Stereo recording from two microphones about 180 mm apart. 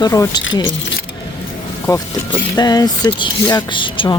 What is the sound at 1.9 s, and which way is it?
Speech, 20° left (ahead or behind).